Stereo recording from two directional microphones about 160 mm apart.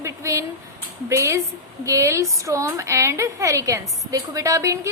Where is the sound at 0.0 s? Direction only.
20° right (ahead or behind).